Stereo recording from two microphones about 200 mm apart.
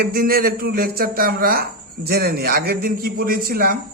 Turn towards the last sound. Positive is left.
turn(degrees=-50)  # may be behind; listen again after turning